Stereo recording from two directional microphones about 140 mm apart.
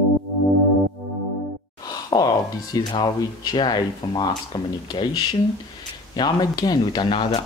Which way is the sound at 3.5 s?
30° left (ahead or behind).